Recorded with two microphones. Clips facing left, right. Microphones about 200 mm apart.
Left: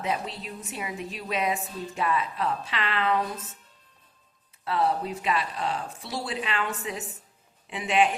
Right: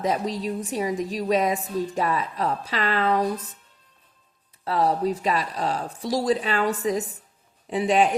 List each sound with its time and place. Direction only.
0.0 s speech: 40° right (ahead or behind)
4.6 s speech: 40° right (ahead or behind)